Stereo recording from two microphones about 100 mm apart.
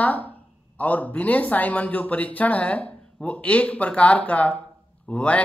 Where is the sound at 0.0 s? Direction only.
15° left (ahead or behind).